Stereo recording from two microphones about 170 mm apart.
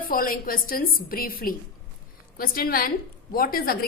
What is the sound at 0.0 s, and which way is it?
A woman's voice, 55° left (ahead or behind).